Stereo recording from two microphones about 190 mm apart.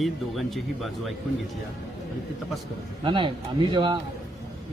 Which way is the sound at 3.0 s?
25° right (ahead or behind).